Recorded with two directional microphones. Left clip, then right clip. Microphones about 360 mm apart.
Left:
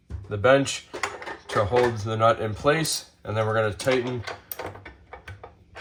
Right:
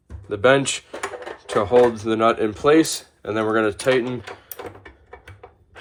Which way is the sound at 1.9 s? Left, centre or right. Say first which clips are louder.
Right 3 dB; right.